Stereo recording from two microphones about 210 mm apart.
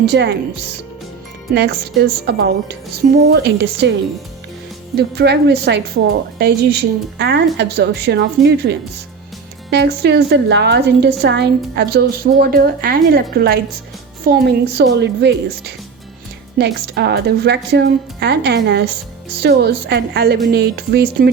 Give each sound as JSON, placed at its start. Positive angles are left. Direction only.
{"t": 0.0, "sound": "a woman's voice", "side_deg": -50}
{"t": 4.9, "sound": "a woman's voice", "side_deg": -50}